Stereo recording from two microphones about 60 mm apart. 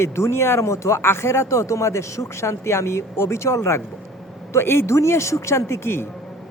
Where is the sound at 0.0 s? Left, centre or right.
Left.